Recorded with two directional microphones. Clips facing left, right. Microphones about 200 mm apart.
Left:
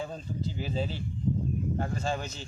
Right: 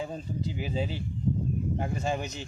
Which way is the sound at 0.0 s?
10° right (ahead or behind).